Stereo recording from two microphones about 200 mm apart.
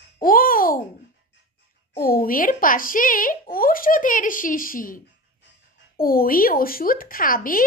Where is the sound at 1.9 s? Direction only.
45° left (ahead or behind).